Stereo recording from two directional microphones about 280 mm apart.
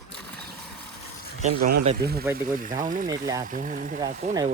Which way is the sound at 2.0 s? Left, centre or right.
Right.